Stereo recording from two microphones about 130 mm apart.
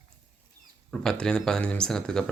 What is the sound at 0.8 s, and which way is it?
Speech, 5° left (ahead or behind).